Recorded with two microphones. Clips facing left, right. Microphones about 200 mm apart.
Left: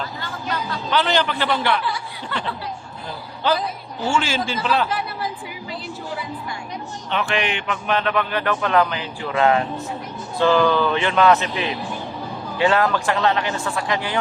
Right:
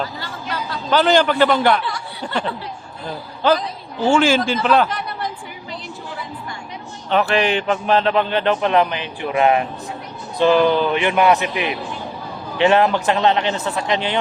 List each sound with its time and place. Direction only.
0.9 s a man's voice: 45° right (ahead or behind)
4.1 s speech: 55° right (ahead or behind)
4.9 s chatter: 5° left (ahead or behind)
7.1 s a man's voice: 40° right (ahead or behind); by 14.2 s 20° right (ahead or behind)